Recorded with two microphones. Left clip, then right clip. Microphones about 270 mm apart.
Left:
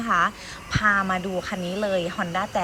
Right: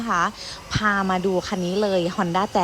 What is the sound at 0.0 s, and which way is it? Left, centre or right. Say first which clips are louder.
Speech: even; centre.